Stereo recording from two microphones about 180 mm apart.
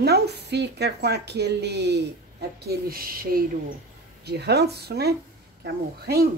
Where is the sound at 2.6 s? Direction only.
60° right (ahead or behind).